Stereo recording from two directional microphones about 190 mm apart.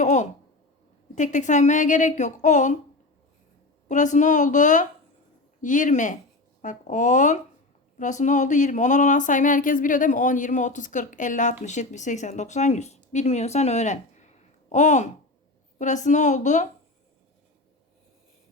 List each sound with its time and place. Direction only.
0.0 s a sound: 40° left (ahead or behind)
1.1 s speech: 40° left (ahead or behind)
3.8 s speech: 40° left (ahead or behind)